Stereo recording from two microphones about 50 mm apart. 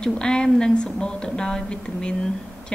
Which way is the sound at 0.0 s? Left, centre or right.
Centre.